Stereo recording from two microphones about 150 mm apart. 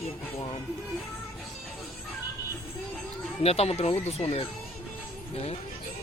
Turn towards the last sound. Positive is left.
turn(degrees=40)  # may be behind; listen again after turning